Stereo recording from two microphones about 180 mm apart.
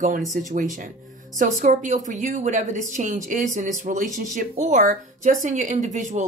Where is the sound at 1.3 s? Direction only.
45° right (ahead or behind).